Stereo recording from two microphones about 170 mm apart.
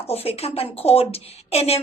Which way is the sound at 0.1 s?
35° left (ahead or behind).